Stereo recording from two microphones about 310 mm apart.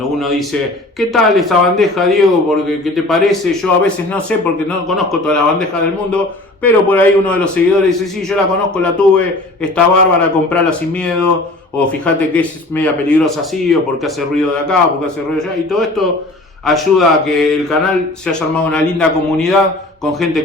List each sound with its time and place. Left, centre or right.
0.2 s speech: centre